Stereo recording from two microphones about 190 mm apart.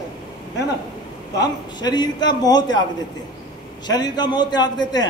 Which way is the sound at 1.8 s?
20° left (ahead or behind).